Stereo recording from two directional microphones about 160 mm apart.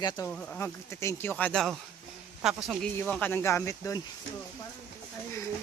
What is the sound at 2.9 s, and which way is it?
Speech, 10° left (ahead or behind).